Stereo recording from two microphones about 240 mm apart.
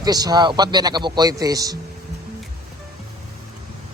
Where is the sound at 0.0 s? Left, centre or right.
Centre.